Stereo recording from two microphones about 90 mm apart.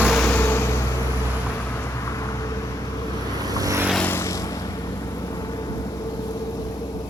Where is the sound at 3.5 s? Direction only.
40° right (ahead or behind).